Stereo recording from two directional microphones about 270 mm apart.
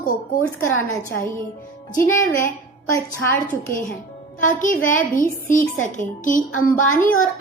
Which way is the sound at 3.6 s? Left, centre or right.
Left.